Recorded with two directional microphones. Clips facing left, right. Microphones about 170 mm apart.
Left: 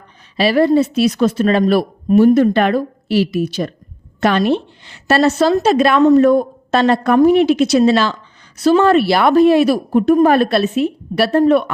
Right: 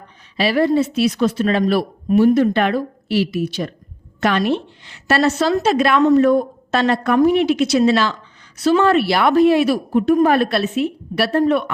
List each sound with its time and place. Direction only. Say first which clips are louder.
0.3 s a woman's voice: left 3 dB; 35° left (ahead or behind)